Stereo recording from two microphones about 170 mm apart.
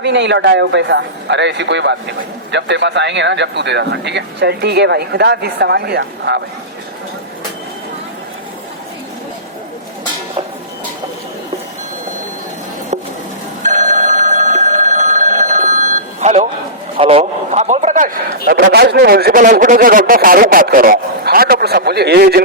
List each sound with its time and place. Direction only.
0.0 s speech: 90° right
13.6 s telephone bell ringing: 45° right (ahead or behind)
17.0 s a man's voice: 35° right (ahead or behind); by 18.2 s 50° right (ahead or behind)
18.4 s speech: 65° right (ahead or behind)